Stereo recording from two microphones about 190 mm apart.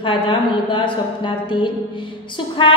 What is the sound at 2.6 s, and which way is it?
Speech, 25° left (ahead or behind).